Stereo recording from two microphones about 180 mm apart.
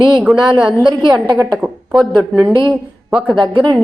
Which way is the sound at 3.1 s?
5° right (ahead or behind).